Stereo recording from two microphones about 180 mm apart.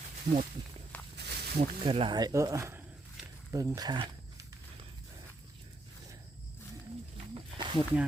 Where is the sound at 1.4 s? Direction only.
65° right (ahead or behind).